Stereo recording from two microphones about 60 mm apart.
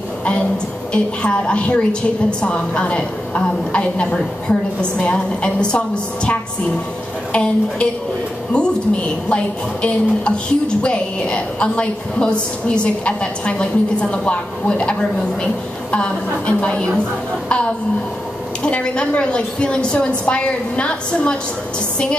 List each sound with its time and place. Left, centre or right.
0.9 s a woman's voice: centre
7.3 s a woman's voice: left
18.6 s a woman's voice: centre